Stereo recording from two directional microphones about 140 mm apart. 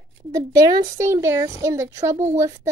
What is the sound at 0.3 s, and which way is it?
A child's voice, 25° right (ahead or behind).